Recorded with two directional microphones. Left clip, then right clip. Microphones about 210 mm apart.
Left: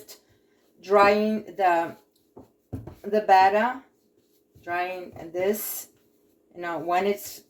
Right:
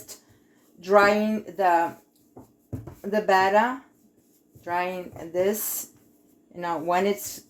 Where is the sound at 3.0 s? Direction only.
40° right (ahead or behind).